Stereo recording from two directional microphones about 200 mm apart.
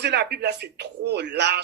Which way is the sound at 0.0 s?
55° right (ahead or behind).